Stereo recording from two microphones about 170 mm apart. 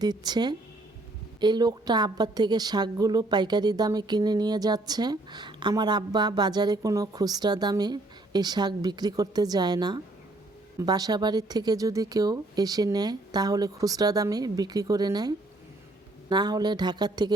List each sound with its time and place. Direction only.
0.0 s a woman's voice: 25° right (ahead or behind)
16.3 s a woman's voice: 25° right (ahead or behind)